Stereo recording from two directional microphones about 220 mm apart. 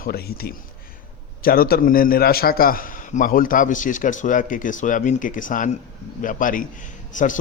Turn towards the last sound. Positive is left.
turn(degrees=35)  # may be behind; listen again after turning